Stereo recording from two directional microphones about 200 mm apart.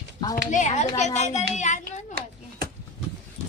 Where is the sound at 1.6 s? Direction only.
35° left (ahead or behind).